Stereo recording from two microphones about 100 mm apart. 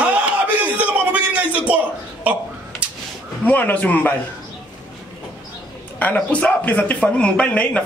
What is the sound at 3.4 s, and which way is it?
Speech, 15° left (ahead or behind).